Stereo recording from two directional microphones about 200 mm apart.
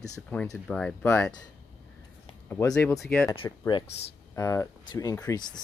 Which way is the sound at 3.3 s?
25° left (ahead or behind).